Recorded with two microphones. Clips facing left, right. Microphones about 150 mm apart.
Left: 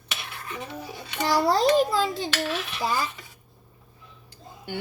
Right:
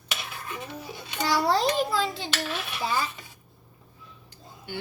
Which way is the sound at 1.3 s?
45° left (ahead or behind).